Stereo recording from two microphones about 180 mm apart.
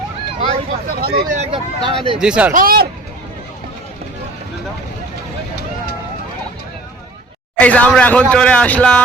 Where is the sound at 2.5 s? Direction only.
50° right (ahead or behind).